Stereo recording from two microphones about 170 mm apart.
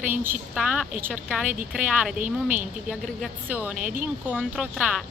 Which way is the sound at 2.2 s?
50° right (ahead or behind).